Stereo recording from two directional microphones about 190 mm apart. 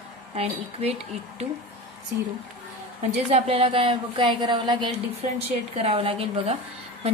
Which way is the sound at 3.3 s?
30° right (ahead or behind).